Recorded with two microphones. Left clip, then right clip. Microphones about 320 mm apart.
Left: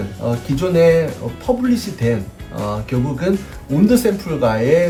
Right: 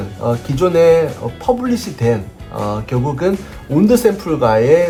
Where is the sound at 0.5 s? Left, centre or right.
Centre.